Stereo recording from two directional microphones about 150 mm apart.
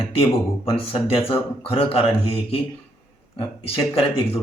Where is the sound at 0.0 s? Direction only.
40° left (ahead or behind).